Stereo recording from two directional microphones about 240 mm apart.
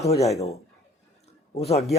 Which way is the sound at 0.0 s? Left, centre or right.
Left.